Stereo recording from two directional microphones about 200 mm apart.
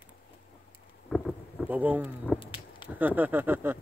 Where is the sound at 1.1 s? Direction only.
Centre (ahead or behind).